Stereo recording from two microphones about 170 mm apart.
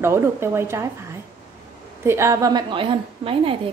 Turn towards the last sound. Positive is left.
turn(degrees=-30)  # may be behind; listen again after turning